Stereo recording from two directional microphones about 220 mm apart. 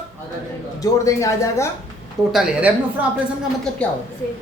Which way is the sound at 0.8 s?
15° left (ahead or behind).